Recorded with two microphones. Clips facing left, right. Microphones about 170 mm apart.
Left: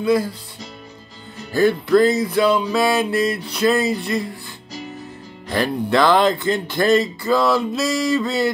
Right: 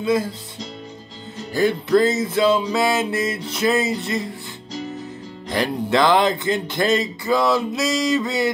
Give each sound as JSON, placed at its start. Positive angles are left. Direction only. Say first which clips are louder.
{"t": 0.0, "sound": "speech", "louder": "left 2 dB", "side_deg": -20}
{"t": 1.5, "sound": "speech", "louder": "left 2 dB", "side_deg": -20}
{"t": 5.5, "sound": "speech", "louder": "left 1 dB", "side_deg": -20}